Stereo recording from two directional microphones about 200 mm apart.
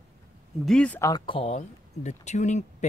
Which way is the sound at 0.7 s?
5° left (ahead or behind).